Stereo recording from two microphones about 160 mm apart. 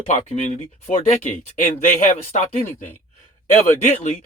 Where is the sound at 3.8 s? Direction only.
45° left (ahead or behind).